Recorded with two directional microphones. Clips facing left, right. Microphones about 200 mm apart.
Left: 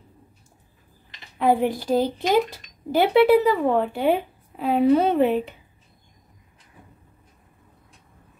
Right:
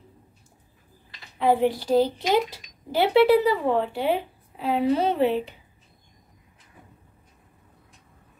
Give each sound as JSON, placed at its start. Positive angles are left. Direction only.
{"t": 1.4, "sound": "speech", "side_deg": 45}